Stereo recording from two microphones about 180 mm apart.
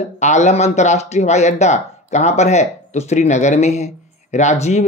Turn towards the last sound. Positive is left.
turn(degrees=40)  # may be behind; listen again after turning